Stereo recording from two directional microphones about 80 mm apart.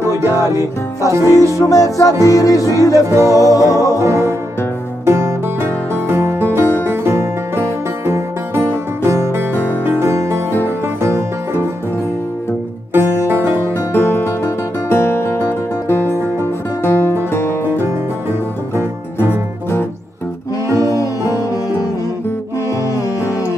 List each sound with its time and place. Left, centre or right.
1.1 s music: right
1.7 s music: left
3.1 s music: right
3.3 s music: left
3.6 s music: right
12.9 s music: right
13.9 s music: left
20.6 s music: right
20.9 s music: left